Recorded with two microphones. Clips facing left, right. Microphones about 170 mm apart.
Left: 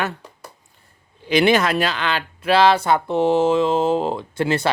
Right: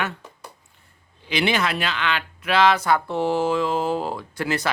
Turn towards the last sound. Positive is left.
turn(degrees=25)  # may be behind; listen again after turning